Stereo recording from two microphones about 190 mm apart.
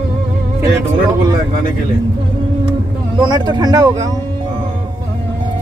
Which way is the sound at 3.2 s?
20° right (ahead or behind).